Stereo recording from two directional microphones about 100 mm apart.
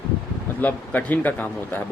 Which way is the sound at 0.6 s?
15° left (ahead or behind).